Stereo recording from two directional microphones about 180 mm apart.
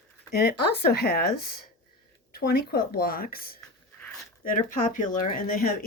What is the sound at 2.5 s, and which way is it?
Speech, 55° left (ahead or behind).